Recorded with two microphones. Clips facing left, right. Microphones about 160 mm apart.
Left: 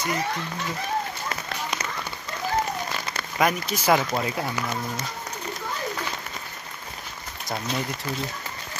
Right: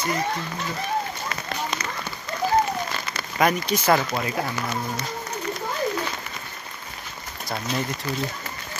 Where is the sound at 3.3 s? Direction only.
Centre (ahead or behind).